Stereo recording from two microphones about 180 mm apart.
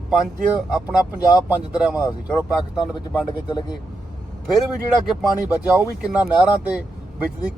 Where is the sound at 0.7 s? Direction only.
5° right (ahead or behind).